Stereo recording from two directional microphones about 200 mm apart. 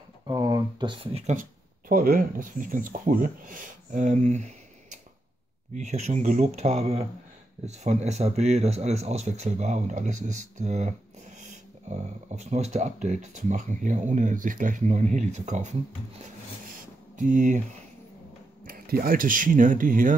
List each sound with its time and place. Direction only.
0.3 s speech: 15° right (ahead or behind); by 4.5 s 35° right (ahead or behind)
5.8 s speech: 35° right (ahead or behind)
16.6 s a sound: 40° right (ahead or behind)
18.7 s speech: 45° right (ahead or behind)